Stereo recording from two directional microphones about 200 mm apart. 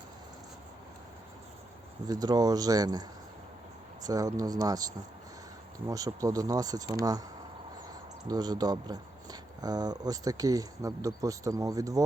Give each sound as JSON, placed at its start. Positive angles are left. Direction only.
{"t": 2.0, "sound": "speech", "side_deg": -20}
{"t": 5.9, "sound": "speech", "side_deg": -15}
{"t": 8.3, "sound": "speech", "side_deg": -20}